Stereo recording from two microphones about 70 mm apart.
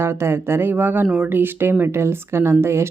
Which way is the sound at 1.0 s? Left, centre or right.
Centre.